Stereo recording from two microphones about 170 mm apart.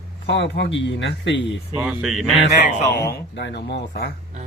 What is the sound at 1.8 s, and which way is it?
Speech, centre (ahead or behind).